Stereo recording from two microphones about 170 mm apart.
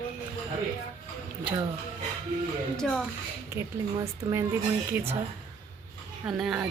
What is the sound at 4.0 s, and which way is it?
A woman's voice, 15° right (ahead or behind).